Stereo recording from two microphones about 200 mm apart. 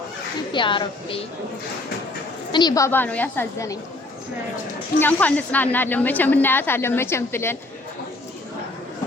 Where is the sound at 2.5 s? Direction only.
20° left (ahead or behind).